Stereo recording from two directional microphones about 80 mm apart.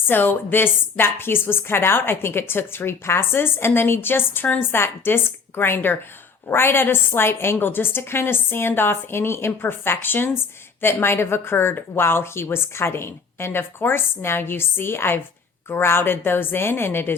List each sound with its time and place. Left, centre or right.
0.1 s a woman's voice: left